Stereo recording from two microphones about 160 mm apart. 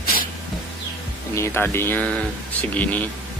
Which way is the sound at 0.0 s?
65° left (ahead or behind).